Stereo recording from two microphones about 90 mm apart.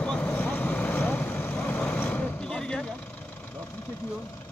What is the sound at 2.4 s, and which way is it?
Vehicle, 10° left (ahead or behind).